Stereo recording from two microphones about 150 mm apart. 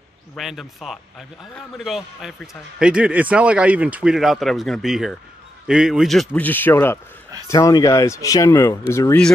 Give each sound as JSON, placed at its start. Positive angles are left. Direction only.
{"t": 0.4, "sound": "a man's voice", "side_deg": 0}